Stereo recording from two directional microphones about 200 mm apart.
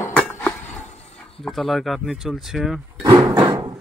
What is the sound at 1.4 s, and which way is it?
Speech, centre (ahead or behind).